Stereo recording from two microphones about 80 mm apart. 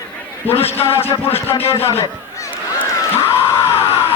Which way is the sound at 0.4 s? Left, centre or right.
Left.